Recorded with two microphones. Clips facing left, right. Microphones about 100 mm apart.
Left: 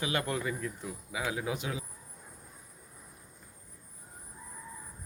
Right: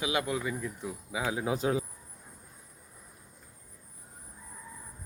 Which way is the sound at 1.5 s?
35° right (ahead or behind).